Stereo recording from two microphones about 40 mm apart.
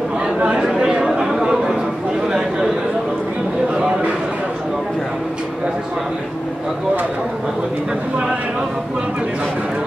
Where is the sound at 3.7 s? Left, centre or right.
Right.